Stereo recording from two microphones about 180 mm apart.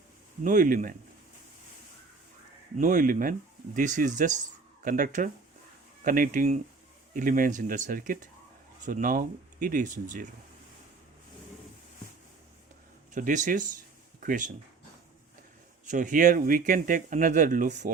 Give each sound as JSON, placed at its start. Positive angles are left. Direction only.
{"t": 0.4, "sound": "speech", "side_deg": -45}
{"t": 2.7, "sound": "speech", "side_deg": -45}
{"t": 13.1, "sound": "speech", "side_deg": -45}
{"t": 15.9, "sound": "speech", "side_deg": -45}